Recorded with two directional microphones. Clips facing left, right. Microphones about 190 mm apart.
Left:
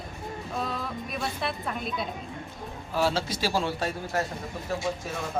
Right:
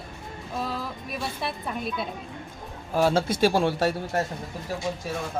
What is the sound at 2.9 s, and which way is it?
A man's voice, 50° right (ahead or behind).